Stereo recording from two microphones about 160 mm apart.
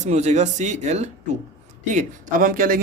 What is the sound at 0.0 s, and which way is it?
Speech, 45° right (ahead or behind).